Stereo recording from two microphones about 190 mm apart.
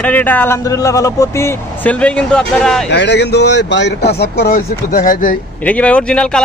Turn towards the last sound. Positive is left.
turn(degrees=5)  # may be behind; listen again after turning